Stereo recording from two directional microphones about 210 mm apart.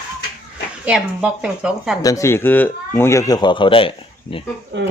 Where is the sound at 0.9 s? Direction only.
5° right (ahead or behind).